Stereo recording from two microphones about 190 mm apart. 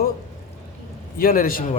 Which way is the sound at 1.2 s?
50° left (ahead or behind).